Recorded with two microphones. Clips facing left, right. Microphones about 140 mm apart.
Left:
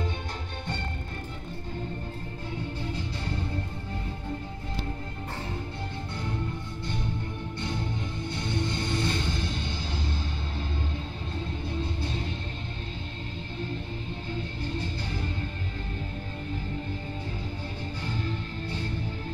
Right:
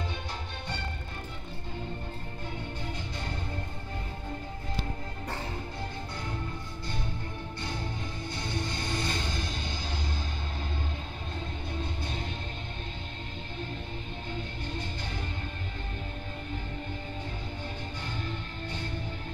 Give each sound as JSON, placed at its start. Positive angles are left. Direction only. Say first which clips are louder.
{"t": 8.3, "sound": "music", "louder": "left 4 dB", "side_deg": 25}